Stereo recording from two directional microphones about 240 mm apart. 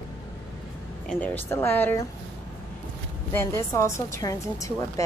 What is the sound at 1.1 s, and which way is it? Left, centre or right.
Speech, centre.